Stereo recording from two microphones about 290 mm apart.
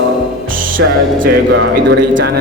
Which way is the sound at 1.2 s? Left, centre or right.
Right.